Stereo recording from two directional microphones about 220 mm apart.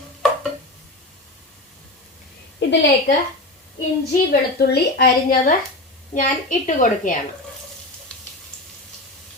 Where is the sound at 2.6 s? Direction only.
50° left (ahead or behind).